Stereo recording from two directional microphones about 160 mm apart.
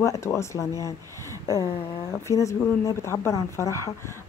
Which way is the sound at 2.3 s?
20° left (ahead or behind).